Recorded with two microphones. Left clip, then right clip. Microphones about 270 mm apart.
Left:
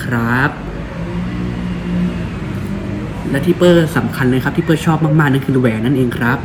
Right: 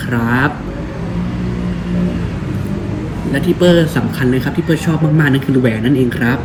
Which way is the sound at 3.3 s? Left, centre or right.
Centre.